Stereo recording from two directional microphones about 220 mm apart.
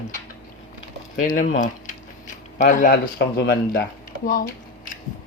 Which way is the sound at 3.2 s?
55° left (ahead or behind).